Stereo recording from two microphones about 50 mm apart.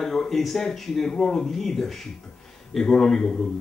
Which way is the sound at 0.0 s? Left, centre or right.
Centre.